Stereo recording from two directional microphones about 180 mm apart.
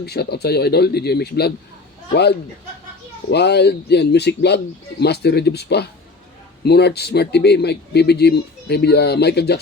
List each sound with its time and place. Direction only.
0.0 s speech: 65° left (ahead or behind)
3.2 s speech: 70° left (ahead or behind)